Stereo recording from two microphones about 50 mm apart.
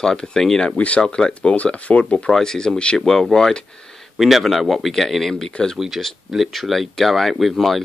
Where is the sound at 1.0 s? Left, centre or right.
Centre.